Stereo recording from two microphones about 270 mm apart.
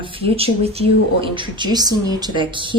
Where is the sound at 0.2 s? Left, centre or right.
Right.